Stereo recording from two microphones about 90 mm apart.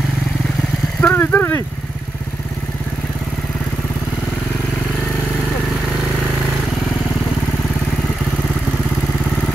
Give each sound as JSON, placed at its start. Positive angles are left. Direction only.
{"t": 1.0, "sound": "speech", "side_deg": 25}